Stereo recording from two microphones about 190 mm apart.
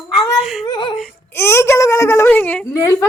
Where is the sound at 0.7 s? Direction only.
25° left (ahead or behind).